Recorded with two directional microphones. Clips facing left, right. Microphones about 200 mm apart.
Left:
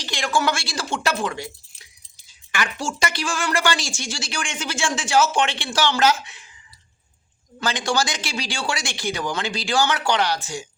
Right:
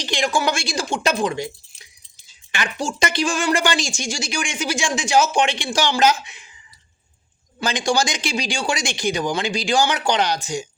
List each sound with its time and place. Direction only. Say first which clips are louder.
0.0 s speech: right 2 dB; 15° right (ahead or behind)
7.6 s speech: right 2 dB; 15° right (ahead or behind)